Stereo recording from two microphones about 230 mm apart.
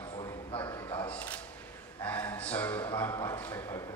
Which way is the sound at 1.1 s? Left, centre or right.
Centre.